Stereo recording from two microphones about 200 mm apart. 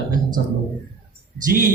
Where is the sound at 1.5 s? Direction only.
45° right (ahead or behind).